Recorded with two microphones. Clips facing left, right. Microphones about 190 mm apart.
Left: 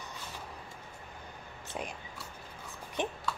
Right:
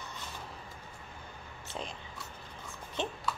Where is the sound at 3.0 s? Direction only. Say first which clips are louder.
Left 2 dB; 15° left (ahead or behind).